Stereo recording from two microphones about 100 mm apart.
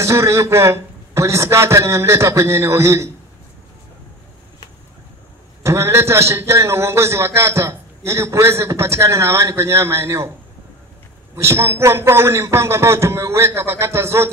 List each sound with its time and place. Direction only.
0.0 s a man's voice: 30° right (ahead or behind)
5.6 s a man's voice: 30° right (ahead or behind)
11.3 s a man's voice: 30° right (ahead or behind)